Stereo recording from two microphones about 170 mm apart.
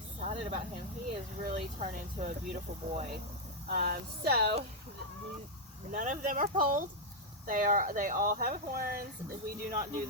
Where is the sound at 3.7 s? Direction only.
65° right (ahead or behind).